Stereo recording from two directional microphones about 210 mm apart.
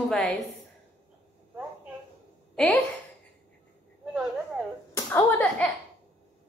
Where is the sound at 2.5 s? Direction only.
5° left (ahead or behind).